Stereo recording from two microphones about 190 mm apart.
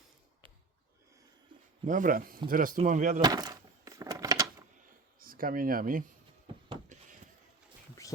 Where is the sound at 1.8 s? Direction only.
45° right (ahead or behind).